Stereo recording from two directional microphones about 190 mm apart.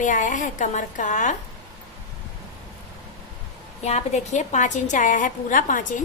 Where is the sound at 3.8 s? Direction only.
35° left (ahead or behind).